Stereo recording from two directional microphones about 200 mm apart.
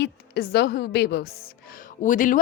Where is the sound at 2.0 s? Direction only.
40° left (ahead or behind).